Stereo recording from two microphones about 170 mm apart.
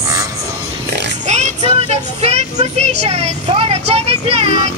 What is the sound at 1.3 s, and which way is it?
Child singing, 40° right (ahead or behind).